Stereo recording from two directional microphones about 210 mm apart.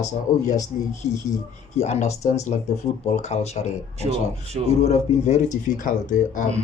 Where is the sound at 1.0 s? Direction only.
30° left (ahead or behind).